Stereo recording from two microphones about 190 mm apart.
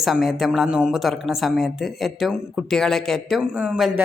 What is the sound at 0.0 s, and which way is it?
Speech, centre (ahead or behind).